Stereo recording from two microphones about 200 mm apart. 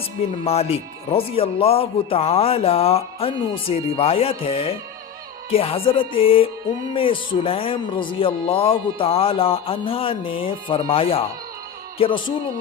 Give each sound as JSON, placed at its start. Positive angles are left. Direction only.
{"t": 0.4, "sound": "speech", "side_deg": 30}